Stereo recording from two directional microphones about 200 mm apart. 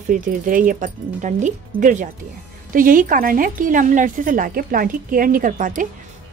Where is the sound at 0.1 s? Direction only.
40° right (ahead or behind).